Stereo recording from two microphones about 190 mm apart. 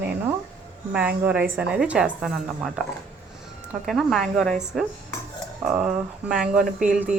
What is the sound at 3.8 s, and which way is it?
A woman's voice, centre (ahead or behind).